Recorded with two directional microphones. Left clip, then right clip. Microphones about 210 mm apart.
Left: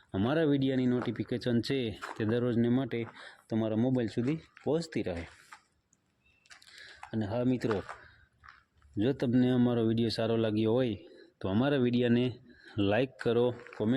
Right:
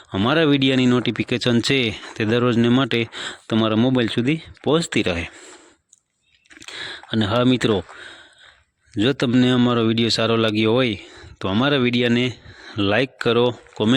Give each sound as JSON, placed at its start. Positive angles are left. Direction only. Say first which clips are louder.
{"t": 0.1, "sound": "speech", "louder": "right 11 dB", "side_deg": -25}
{"t": 6.7, "sound": "a sound", "louder": "right 14 dB", "side_deg": -35}
{"t": 9.0, "sound": "speech", "louder": "right 11 dB", "side_deg": -30}